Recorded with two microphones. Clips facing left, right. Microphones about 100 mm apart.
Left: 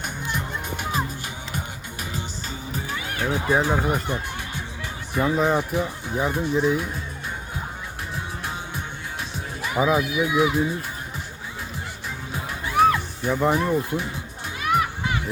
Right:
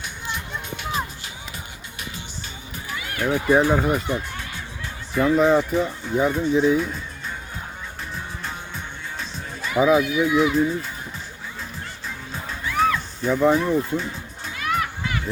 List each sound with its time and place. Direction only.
0.0 s music: 50° left (ahead or behind)
2.7 s music: 20° left (ahead or behind)
3.7 s speech: 5° left (ahead or behind)
4.1 s music: 20° left (ahead or behind)
5.1 s speech: 10° left (ahead or behind)
8.1 s music: 15° left (ahead or behind)
9.3 s speech: 15° left (ahead or behind)
12.0 s music: 15° left (ahead or behind)
14.6 s children playing: 15° left (ahead or behind)